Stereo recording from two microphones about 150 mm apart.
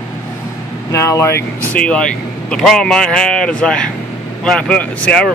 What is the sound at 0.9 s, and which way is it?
A man's voice, 20° left (ahead or behind).